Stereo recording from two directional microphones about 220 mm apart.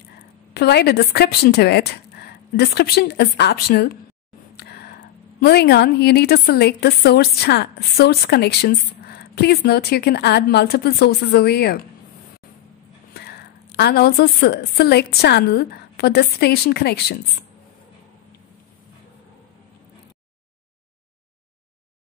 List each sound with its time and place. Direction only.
0.6 s a woman's voice: 50° left (ahead or behind)
4.6 s whispering: 45° left (ahead or behind)
5.4 s a woman's voice: 45° left (ahead or behind)
13.1 s a woman's voice: 45° left (ahead or behind)